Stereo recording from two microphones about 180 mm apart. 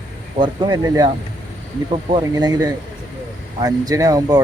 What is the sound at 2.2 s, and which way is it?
Speech, 20° right (ahead or behind).